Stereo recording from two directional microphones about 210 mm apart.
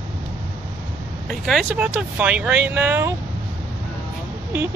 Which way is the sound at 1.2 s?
Centre (ahead or behind).